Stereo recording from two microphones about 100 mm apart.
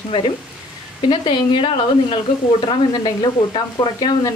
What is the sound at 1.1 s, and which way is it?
Speech, 45° left (ahead or behind).